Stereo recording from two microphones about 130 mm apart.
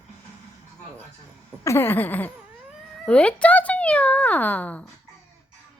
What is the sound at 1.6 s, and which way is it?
Speech, 20° left (ahead or behind).